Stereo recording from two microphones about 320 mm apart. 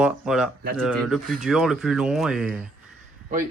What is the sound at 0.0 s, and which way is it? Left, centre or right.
Speech, centre.